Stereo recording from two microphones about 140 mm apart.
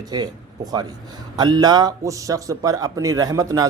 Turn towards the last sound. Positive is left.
turn(degrees=-25)  # may be behind; listen again after turning